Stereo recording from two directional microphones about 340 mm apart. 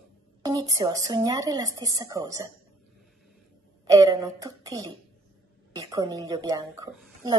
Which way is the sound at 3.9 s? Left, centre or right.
Centre.